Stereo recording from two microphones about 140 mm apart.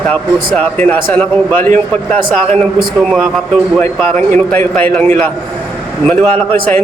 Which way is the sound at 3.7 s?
5° left (ahead or behind).